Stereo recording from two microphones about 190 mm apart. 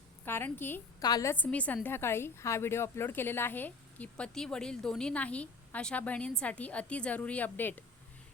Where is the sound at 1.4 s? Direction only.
10° left (ahead or behind).